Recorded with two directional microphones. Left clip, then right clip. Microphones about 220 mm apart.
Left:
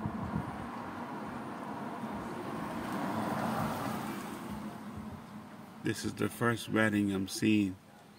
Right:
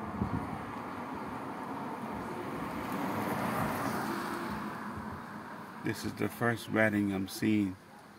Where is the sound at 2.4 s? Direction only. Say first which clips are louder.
Right 1 dB; 40° right (ahead or behind); by 3.7 s 25° right (ahead or behind).